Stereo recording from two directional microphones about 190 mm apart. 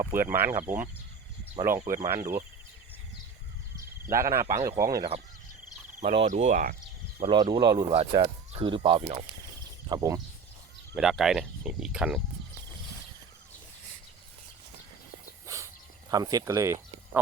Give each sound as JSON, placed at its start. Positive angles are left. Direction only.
{"t": 0.0, "sound": "speech", "side_deg": -10}
{"t": 4.1, "sound": "speech", "side_deg": -15}
{"t": 6.0, "sound": "speech", "side_deg": -35}
{"t": 7.2, "sound": "speech", "side_deg": -25}
{"t": 9.9, "sound": "speech", "side_deg": -15}
{"t": 10.9, "sound": "speech", "side_deg": 0}
{"t": 15.4, "sound": "a sound", "side_deg": -15}